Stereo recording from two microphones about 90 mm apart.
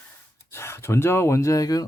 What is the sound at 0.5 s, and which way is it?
Speech, 30° left (ahead or behind).